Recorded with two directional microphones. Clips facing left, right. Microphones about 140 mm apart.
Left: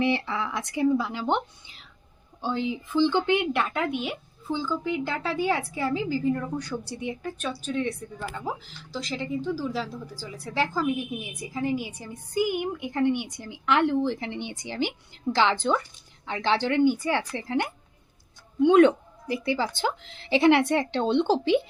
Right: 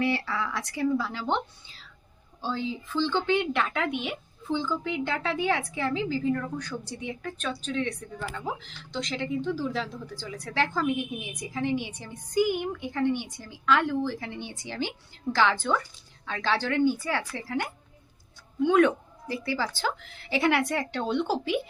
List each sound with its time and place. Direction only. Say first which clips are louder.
0.0 s a woman's voice: left 2 dB; 20° left (ahead or behind)